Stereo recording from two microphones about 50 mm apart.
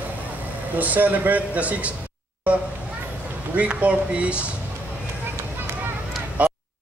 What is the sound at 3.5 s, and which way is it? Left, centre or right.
Speech, right.